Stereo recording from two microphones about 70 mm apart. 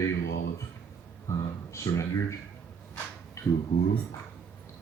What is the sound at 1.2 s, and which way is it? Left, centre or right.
Speech, left.